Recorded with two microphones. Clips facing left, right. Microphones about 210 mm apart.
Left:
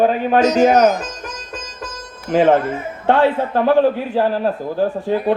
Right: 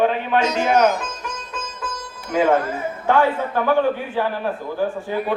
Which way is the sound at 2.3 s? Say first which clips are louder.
Left 4 dB; 30° left (ahead or behind).